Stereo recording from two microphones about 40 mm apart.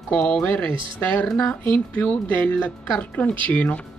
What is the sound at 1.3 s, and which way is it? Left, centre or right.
Speech, centre.